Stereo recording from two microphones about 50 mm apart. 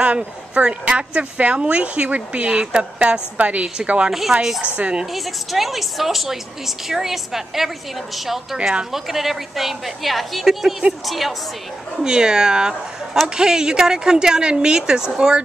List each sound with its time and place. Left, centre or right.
0.0 s speech: right
4.1 s a woman's voice: centre
4.7 s speech: right
5.1 s a woman's voice: centre
12.0 s a woman's voice: centre